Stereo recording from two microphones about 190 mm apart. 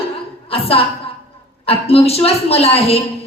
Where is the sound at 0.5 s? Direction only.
30° left (ahead or behind).